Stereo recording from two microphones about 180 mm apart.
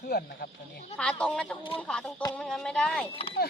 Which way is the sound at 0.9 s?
5° left (ahead or behind).